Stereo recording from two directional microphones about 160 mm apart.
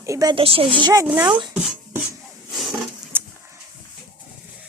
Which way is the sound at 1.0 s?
10° right (ahead or behind).